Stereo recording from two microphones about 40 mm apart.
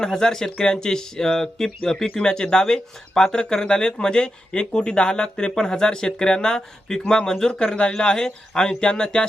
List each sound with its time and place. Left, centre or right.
0.0 s speech: centre